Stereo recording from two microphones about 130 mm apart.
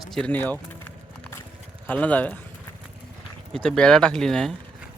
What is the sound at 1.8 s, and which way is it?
Speech, 10° left (ahead or behind).